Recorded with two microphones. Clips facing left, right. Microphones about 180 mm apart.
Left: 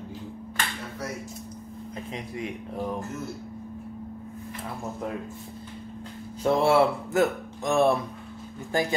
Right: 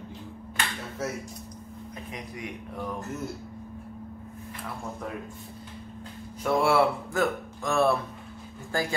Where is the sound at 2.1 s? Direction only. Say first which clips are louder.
Left 4 dB; 25° left (ahead or behind).